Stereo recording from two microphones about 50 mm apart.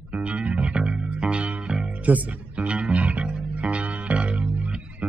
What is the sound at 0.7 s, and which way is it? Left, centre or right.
Music, centre.